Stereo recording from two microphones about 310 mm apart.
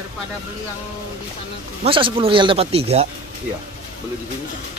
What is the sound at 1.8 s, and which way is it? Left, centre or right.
Speech, centre.